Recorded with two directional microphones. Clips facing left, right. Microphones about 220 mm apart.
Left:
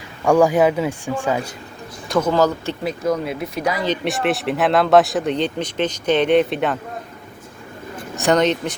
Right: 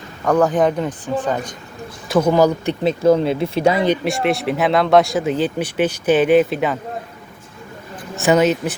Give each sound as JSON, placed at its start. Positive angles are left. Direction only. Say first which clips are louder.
{"t": 0.3, "sound": "speech", "louder": "left 1 dB", "side_deg": 10}
{"t": 2.1, "sound": "speech", "louder": "right 3 dB", "side_deg": -15}
{"t": 3.0, "sound": "speech", "louder": "right 8 dB", "side_deg": -30}
{"t": 4.0, "sound": "speech", "louder": "right 2 dB", "side_deg": 0}
{"t": 8.1, "sound": "speech", "louder": "right 2 dB", "side_deg": -5}